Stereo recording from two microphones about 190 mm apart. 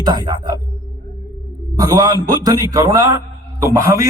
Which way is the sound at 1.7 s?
20° right (ahead or behind).